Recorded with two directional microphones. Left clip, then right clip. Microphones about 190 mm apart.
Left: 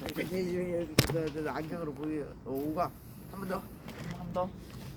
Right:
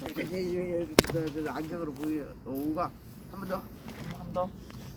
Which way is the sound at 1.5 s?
60° left (ahead or behind).